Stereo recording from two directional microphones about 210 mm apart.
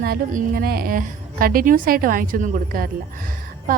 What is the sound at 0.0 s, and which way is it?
A woman's voice, 45° right (ahead or behind).